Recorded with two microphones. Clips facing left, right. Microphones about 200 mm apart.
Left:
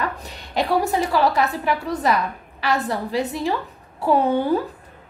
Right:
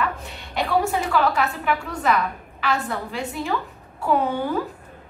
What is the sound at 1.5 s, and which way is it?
A woman's voice, 35° left (ahead or behind).